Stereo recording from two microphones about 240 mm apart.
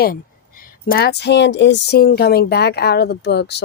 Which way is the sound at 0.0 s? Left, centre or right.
Left.